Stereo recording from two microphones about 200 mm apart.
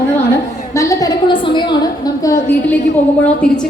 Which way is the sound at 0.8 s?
15° left (ahead or behind).